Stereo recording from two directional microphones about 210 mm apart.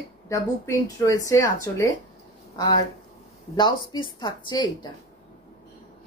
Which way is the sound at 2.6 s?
20° left (ahead or behind).